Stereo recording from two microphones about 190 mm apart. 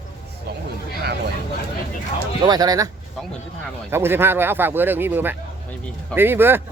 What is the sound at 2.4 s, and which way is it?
Speech, 20° right (ahead or behind).